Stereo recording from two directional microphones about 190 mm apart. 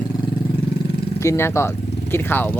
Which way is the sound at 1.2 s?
15° left (ahead or behind).